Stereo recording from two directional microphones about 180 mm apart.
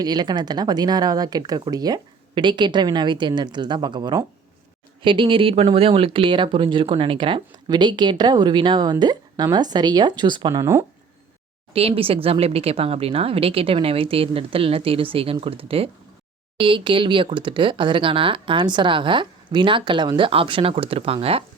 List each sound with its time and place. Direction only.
0.0 s speech: 20° right (ahead or behind)
11.7 s speech: 35° right (ahead or behind)